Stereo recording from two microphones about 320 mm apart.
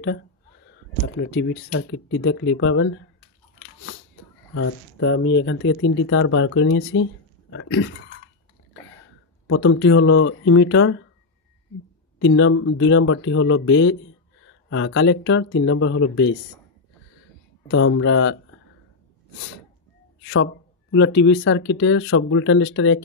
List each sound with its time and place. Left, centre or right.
1.2 s speech: left
5.0 s speech: left
9.5 s speech: left
12.2 s speech: left
17.6 s speech: left
20.9 s speech: left